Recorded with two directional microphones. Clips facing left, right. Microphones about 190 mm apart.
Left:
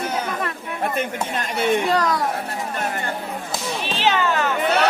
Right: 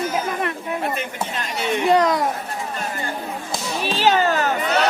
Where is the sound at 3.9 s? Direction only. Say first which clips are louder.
Right 3 dB; 40° right (ahead or behind).